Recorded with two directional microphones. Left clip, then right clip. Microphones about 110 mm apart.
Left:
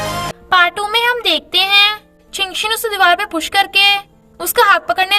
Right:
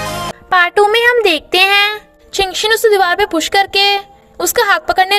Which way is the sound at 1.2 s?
60° right (ahead or behind).